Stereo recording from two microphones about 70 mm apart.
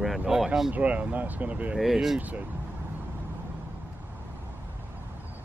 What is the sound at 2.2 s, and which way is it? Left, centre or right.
Speech, right.